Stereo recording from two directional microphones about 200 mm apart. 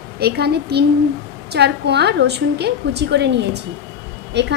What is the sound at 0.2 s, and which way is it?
A woman's voice, 55° right (ahead or behind).